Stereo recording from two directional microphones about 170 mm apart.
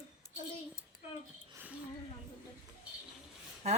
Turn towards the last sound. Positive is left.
turn(degrees=-40)  # may be behind; listen again after turning